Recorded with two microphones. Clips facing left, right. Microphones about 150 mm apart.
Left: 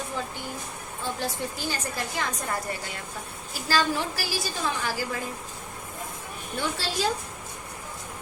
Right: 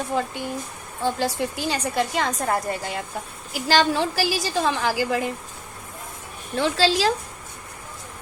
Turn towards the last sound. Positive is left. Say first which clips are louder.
# right 7 dB
turn(degrees=-90)